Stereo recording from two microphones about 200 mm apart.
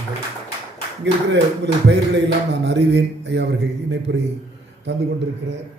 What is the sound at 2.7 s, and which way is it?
A man's voice, 60° right (ahead or behind).